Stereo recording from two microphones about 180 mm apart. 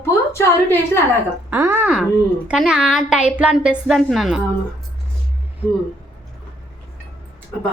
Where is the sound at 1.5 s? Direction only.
15° right (ahead or behind).